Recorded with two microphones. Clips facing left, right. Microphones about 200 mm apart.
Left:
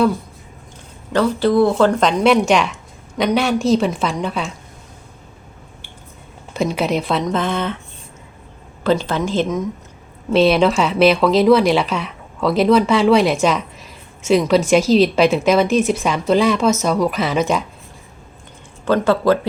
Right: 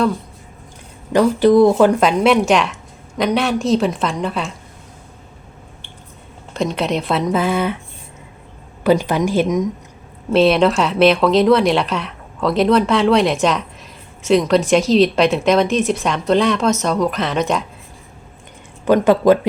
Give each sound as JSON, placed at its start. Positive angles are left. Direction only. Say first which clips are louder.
{"t": 1.1, "sound": "speech", "louder": "right 4 dB", "side_deg": -15}
{"t": 6.5, "sound": "speech", "louder": "left 1 dB", "side_deg": 5}
{"t": 8.8, "sound": "speech", "louder": "right 3 dB", "side_deg": -15}
{"t": 10.2, "sound": "speech", "louder": "right 1 dB", "side_deg": 0}
{"t": 18.9, "sound": "speech", "louder": "right 3 dB", "side_deg": -15}